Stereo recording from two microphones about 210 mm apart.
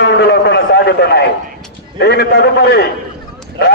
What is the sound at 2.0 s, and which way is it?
Speech, 50° left (ahead or behind).